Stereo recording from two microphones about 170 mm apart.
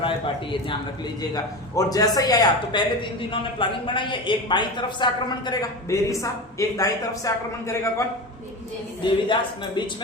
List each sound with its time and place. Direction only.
1.3 s a man's voice: 20° left (ahead or behind)
9.0 s a man's voice: 30° left (ahead or behind)